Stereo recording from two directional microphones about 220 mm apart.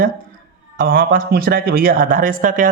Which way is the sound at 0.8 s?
40° right (ahead or behind).